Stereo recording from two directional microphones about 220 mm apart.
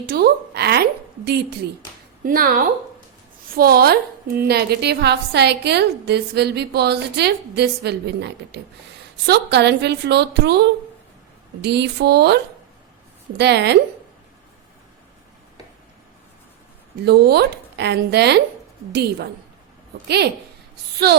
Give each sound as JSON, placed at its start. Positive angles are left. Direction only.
{"t": 0.1, "sound": "a woman's voice", "side_deg": -45}
{"t": 17.0, "sound": "a woman's voice", "side_deg": -50}